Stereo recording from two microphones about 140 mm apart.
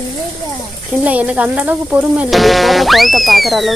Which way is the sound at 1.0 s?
10° right (ahead or behind).